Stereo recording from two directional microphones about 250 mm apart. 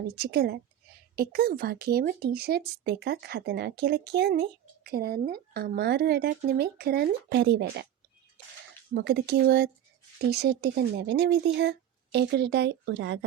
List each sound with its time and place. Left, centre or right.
0.2 s speech: right
9.0 s speech: right